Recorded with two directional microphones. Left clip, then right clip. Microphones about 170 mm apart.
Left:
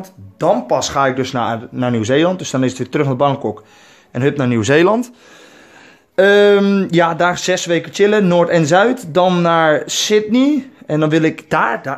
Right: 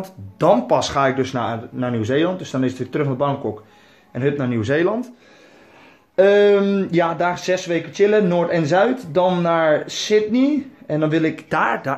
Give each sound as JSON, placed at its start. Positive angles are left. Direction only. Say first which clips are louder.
{"t": 0.0, "sound": "speech", "louder": "left 1 dB", "side_deg": 0}
{"t": 0.7, "sound": "speech", "louder": "left 1 dB", "side_deg": 20}
{"t": 0.9, "sound": "speech", "louder": "left 3 dB", "side_deg": 40}
{"t": 6.1, "sound": "speech", "louder": "left 3 dB", "side_deg": 45}